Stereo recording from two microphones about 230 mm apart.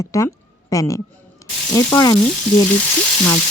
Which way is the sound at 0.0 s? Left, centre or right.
Centre.